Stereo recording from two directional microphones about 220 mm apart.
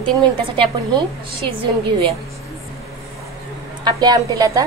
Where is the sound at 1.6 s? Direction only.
25° right (ahead or behind).